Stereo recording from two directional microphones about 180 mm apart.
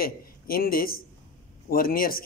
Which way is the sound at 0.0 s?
55° left (ahead or behind).